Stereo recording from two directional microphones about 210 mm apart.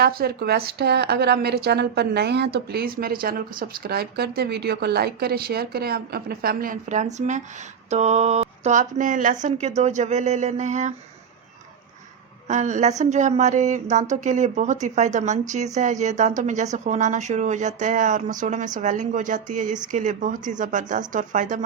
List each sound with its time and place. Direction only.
0.0 s a woman's voice: 45° right (ahead or behind)
12.5 s speech: 35° right (ahead or behind)